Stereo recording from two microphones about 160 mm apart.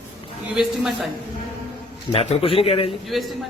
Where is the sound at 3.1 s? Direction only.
Centre (ahead or behind).